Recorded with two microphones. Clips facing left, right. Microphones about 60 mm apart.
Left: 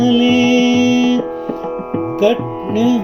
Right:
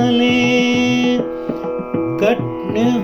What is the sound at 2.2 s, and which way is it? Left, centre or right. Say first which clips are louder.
Music: left 4 dB; right.